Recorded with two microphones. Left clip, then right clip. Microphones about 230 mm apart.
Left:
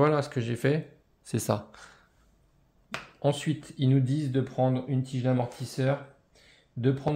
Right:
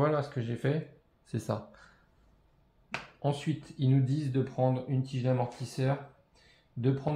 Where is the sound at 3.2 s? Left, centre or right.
Left.